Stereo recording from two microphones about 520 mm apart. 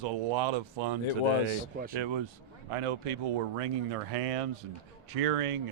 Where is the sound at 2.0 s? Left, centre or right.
Right.